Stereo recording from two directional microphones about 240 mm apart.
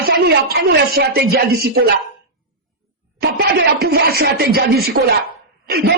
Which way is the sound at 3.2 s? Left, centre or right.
Right.